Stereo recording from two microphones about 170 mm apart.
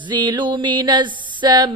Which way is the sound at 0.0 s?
25° right (ahead or behind).